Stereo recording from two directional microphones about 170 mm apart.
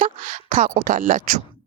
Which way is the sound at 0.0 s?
45° right (ahead or behind).